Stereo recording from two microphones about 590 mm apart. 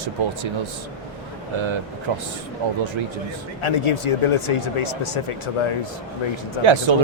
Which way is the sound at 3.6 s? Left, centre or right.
Left.